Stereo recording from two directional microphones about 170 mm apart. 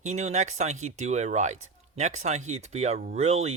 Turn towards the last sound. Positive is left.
turn(degrees=-40)  # may be behind; listen again after turning